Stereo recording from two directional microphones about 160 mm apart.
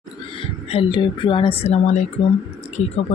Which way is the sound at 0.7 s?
30° left (ahead or behind).